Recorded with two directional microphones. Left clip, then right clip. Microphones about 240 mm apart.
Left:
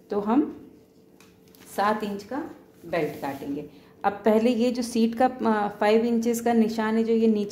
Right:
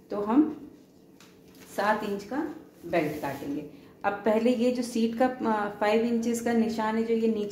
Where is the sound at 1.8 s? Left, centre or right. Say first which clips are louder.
Left 2 dB; left.